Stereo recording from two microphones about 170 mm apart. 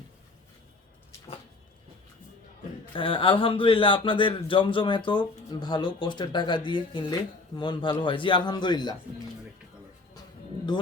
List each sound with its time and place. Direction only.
2.9 s speech: 30° left (ahead or behind)